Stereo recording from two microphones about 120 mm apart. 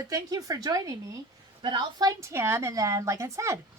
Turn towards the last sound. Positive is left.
turn(degrees=-25)  # may be behind; listen again after turning